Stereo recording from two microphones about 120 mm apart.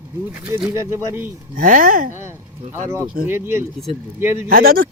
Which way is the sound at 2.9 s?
20° right (ahead or behind).